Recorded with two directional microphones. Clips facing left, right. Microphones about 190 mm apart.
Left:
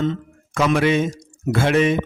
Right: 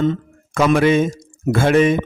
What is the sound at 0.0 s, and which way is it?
Speech, 50° right (ahead or behind).